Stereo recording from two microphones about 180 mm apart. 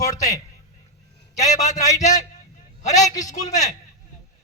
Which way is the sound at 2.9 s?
20° left (ahead or behind).